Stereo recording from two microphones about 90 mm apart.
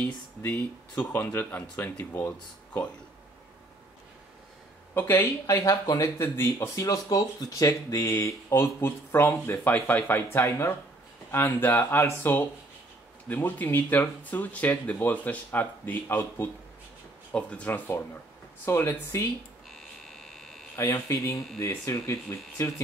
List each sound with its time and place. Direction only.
0.0 s speech: 15° left (ahead or behind)
4.9 s speech: 25° left (ahead or behind)
5.9 s speech: 35° left (ahead or behind)
6.2 s speech: 25° left (ahead or behind)
17.3 s speech: 10° left (ahead or behind)
19.7 s buzzer: 5° left (ahead or behind)
20.9 s speech: 35° left (ahead or behind)